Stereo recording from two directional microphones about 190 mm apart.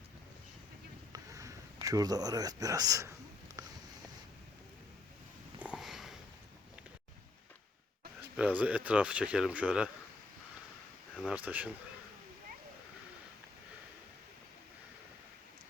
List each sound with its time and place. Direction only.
1.1 s a sound: 15° right (ahead or behind)
5.5 s sniff: 5° right (ahead or behind)
8.2 s speech: 10° right (ahead or behind)
11.2 s speech: 5° right (ahead or behind)